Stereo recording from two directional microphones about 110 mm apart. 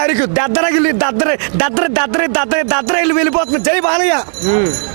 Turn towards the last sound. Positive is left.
turn(degrees=-20)  # may be behind; listen again after turning